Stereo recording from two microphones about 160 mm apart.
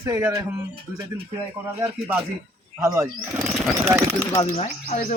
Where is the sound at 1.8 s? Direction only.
15° right (ahead or behind).